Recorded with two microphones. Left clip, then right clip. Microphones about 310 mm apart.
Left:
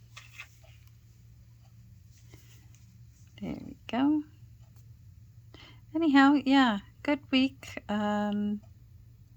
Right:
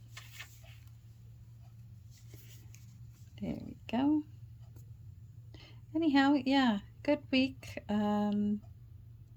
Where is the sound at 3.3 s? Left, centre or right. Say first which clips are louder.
Left 2 dB; centre.